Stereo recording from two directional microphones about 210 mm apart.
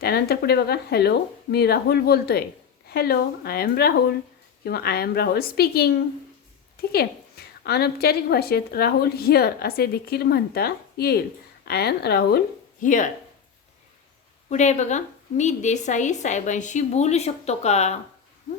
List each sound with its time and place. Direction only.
0.0 s a woman's voice: 45° left (ahead or behind)
12.8 s a woman's voice: 40° left (ahead or behind)
14.5 s a woman's voice: 35° left (ahead or behind)